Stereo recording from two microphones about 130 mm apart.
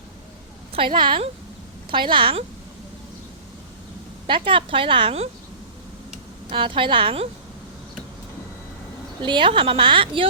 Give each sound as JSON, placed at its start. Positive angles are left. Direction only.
{"t": 0.7, "sound": "a woman's voice", "side_deg": -40}
{"t": 4.3, "sound": "a woman's voice", "side_deg": -40}
{"t": 6.5, "sound": "a woman's voice", "side_deg": -40}
{"t": 9.2, "sound": "a woman's voice", "side_deg": -40}